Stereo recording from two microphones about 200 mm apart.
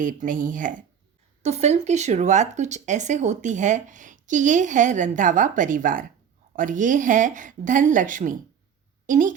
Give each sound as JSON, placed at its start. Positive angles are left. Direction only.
{"t": 0.0, "sound": "a woman's voice", "side_deg": -40}